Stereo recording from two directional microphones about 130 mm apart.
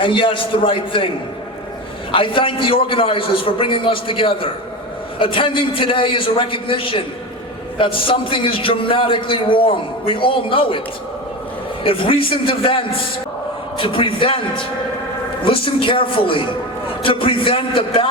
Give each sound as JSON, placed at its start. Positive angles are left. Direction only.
{"t": 0.0, "sound": "a man's voice", "side_deg": 40}
{"t": 2.1, "sound": "a man's voice", "side_deg": 40}
{"t": 11.8, "sound": "a man's voice", "side_deg": 45}